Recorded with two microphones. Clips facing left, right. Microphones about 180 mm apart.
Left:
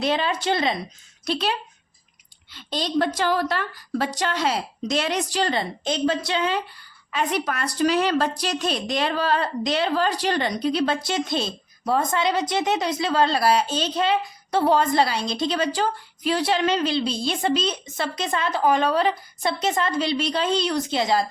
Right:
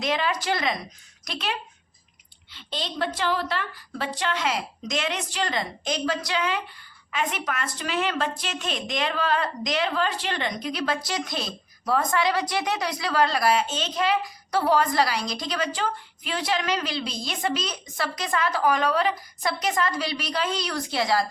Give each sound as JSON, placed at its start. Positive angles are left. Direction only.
{"t": 0.0, "sound": "a woman's voice", "side_deg": 30}
{"t": 2.5, "sound": "a woman's voice", "side_deg": 45}